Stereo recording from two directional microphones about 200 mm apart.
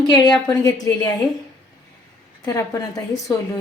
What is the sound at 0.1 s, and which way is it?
Speech, 20° left (ahead or behind).